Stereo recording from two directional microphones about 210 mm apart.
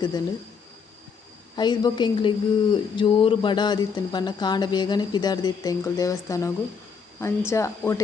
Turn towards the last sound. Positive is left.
turn(degrees=15)  # may be behind; listen again after turning